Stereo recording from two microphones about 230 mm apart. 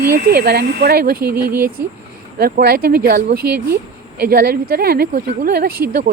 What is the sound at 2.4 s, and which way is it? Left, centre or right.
A woman's voice, right.